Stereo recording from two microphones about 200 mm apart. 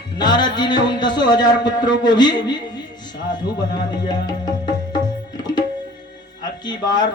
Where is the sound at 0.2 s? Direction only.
20° left (ahead or behind).